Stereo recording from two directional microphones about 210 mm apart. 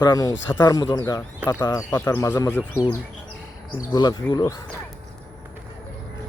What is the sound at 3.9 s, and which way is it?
Speech, 20° left (ahead or behind).